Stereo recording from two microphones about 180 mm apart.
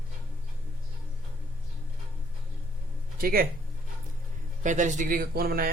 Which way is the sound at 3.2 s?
55° right (ahead or behind).